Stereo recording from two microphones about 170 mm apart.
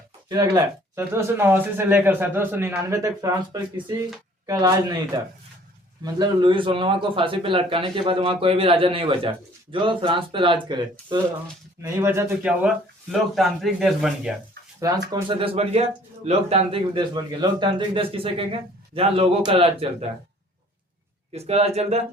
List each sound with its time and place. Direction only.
0.3 s speech: 20° right (ahead or behind)
11.8 s speech: 15° right (ahead or behind)
14.8 s speech: 20° right (ahead or behind)
15.1 s speech: 30° right (ahead or behind)
21.3 s speech: 40° right (ahead or behind)